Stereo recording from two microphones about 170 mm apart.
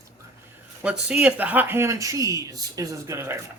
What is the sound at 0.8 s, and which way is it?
Speech, 5° right (ahead or behind).